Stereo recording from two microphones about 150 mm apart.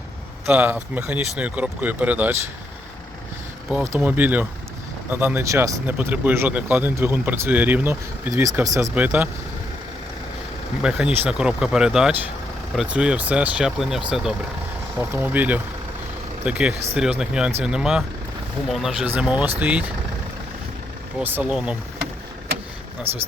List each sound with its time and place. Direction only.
0.4 s speech: 10° right (ahead or behind)
3.7 s speech: 10° right (ahead or behind)
9.0 s speech: 10° right (ahead or behind)
10.8 s speech: 10° right (ahead or behind)
21.2 s speech: 5° right (ahead or behind)
23.1 s speech: 40° right (ahead or behind)